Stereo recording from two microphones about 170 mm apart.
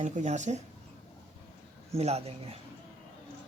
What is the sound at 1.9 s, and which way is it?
Speech, 35° right (ahead or behind).